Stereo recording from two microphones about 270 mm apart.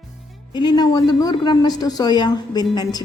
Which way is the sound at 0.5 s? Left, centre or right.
Centre.